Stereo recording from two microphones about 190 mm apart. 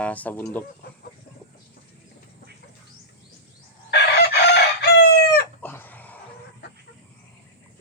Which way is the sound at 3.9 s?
60° left (ahead or behind).